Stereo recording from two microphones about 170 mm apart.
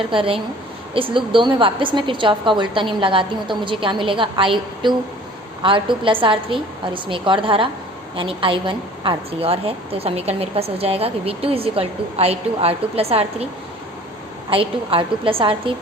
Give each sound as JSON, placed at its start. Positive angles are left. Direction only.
{"t": 0.1, "sound": "a woman's voice", "side_deg": -30}
{"t": 14.5, "sound": "a woman's voice", "side_deg": -30}